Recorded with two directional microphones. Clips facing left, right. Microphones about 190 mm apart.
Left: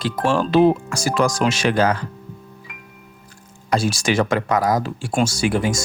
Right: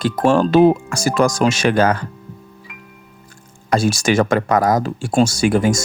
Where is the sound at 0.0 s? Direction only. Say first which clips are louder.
Right 5 dB; 50° right (ahead or behind).